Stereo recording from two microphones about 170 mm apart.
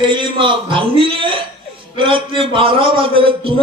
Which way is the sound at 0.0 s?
30° right (ahead or behind).